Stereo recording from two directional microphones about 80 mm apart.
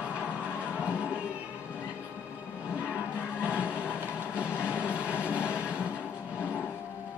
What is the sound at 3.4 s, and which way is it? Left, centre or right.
Vehicle, centre.